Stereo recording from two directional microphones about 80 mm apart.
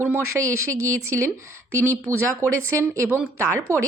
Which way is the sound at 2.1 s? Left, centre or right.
Right.